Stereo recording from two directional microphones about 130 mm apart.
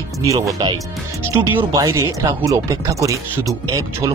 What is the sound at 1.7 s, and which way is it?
Speech, 25° right (ahead or behind).